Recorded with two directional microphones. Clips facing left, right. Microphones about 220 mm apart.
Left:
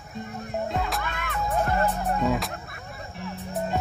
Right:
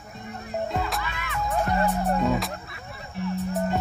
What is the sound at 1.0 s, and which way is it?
Music, 50° left (ahead or behind).